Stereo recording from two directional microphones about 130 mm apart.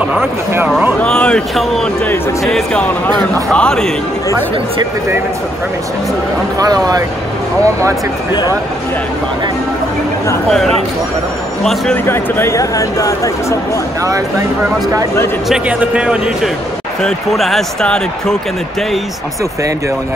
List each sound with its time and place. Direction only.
0.6 s speech: 15° right (ahead or behind)
1.0 s speech: 5° left (ahead or behind)
6.6 s speech: 30° right (ahead or behind)
11.6 s speech: centre (ahead or behind)
12.1 s speech: 20° left (ahead or behind)
15.4 s speech: 5° right (ahead or behind)